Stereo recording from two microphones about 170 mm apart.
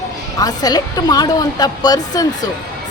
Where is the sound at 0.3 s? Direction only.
20° left (ahead or behind).